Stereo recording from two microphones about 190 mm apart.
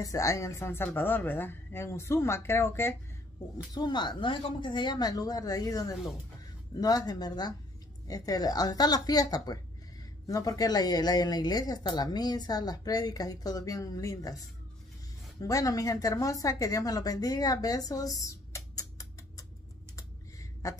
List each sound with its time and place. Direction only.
0.0 s speech: 15° left (ahead or behind)
15.4 s speech: 20° left (ahead or behind)
20.0 s scissors: 15° left (ahead or behind)